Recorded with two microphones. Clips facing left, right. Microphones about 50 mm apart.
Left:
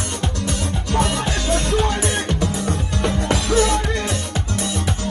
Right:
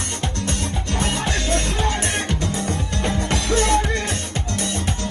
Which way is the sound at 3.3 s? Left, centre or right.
Right.